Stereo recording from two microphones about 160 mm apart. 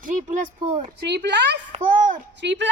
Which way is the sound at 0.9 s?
90° right.